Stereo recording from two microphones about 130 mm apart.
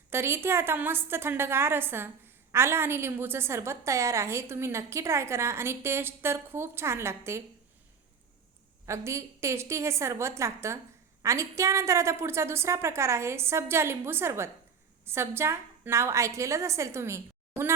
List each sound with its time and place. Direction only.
0.1 s a woman's voice: 20° right (ahead or behind)
8.9 s a woman's voice: 20° right (ahead or behind)